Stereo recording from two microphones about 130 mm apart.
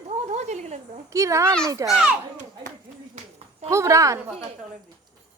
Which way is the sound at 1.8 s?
5° right (ahead or behind).